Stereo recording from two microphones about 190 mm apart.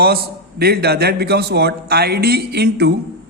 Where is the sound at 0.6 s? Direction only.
55° right (ahead or behind).